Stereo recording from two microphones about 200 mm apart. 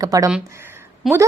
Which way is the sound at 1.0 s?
Centre (ahead or behind).